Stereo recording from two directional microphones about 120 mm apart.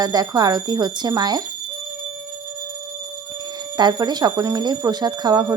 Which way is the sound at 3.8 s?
35° right (ahead or behind).